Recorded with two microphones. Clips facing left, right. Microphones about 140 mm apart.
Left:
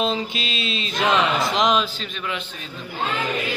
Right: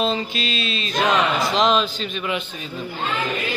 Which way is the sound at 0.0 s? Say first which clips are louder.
Right 1 dB; 20° left (ahead or behind).